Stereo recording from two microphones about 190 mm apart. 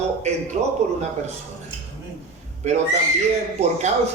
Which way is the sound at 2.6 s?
35° right (ahead or behind).